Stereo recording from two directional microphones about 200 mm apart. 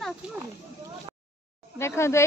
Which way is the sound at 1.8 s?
15° left (ahead or behind).